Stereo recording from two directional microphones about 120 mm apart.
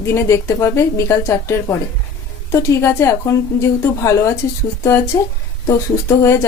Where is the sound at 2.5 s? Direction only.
25° left (ahead or behind).